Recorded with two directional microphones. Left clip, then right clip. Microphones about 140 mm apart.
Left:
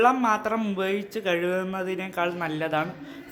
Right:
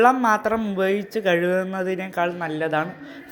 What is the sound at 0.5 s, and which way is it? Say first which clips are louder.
Speech: right 3 dB; centre (ahead or behind).